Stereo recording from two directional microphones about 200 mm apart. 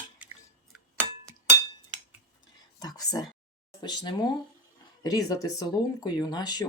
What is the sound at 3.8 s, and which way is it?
Speech, 20° left (ahead or behind).